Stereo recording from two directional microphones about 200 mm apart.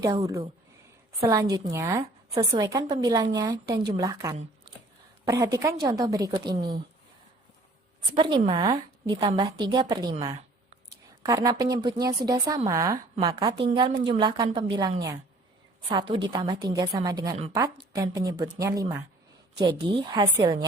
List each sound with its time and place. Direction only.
0.0 s a woman's voice: 15° right (ahead or behind)
8.1 s a woman's voice: 25° right (ahead or behind)
20.1 s a woman's voice: 20° right (ahead or behind)